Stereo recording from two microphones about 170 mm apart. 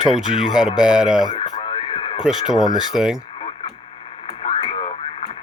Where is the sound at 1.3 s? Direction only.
30° left (ahead or behind).